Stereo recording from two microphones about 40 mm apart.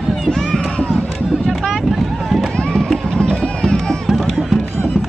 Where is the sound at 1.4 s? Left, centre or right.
Centre.